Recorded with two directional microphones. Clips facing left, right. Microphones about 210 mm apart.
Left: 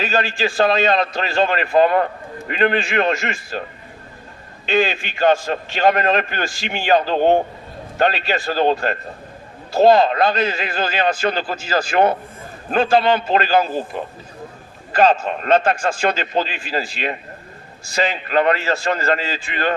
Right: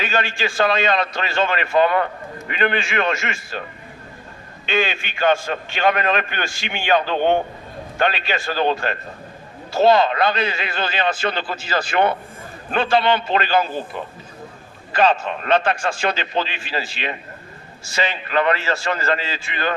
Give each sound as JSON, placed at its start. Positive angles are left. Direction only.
{"t": 0.0, "sound": "a man's voice", "side_deg": 40}
{"t": 4.6, "sound": "a man's voice", "side_deg": 40}